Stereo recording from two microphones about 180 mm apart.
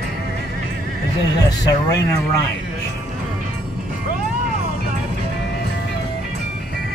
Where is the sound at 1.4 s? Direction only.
20° left (ahead or behind).